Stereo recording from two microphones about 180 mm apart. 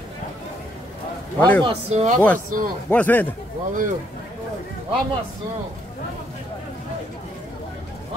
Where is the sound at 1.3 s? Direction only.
10° left (ahead or behind).